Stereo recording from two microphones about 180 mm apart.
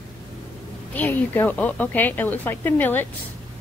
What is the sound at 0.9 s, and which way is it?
A woman's voice, 10° left (ahead or behind).